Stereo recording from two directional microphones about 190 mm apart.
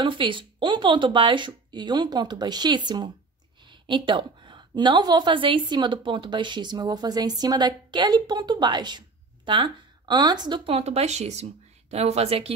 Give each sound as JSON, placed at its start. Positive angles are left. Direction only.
{"t": 0.0, "sound": "a woman's voice", "side_deg": -25}